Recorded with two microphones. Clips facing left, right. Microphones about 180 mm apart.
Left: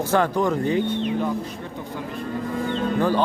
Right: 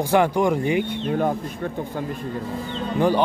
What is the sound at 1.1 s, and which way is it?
Speech, 55° right (ahead or behind).